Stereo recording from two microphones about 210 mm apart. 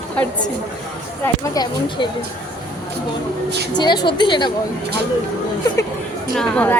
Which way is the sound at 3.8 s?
20° left (ahead or behind).